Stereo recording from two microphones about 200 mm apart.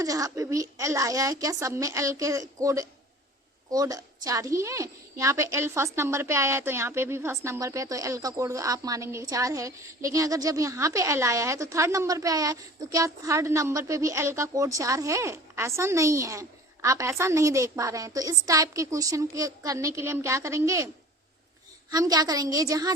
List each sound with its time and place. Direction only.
0.0 s a woman's voice: 15° right (ahead or behind)